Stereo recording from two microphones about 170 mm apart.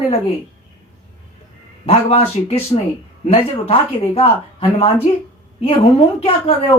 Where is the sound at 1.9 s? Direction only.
35° left (ahead or behind).